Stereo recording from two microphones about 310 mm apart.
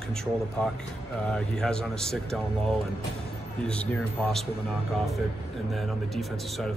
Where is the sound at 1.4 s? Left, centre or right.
Centre.